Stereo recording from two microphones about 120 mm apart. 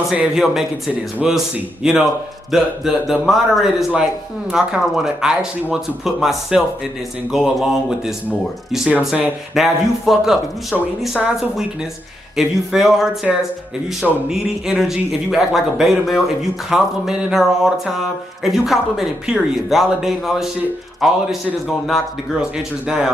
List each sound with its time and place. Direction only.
0.1 s speech: 5° right (ahead or behind)